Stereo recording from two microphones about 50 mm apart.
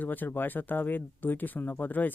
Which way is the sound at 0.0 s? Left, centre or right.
Left.